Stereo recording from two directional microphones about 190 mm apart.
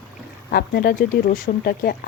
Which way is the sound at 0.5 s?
55° left (ahead or behind).